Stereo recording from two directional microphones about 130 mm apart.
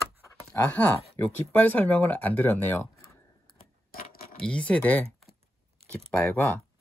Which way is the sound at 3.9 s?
90° left.